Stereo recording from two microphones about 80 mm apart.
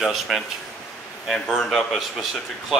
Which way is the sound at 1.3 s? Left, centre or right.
Centre.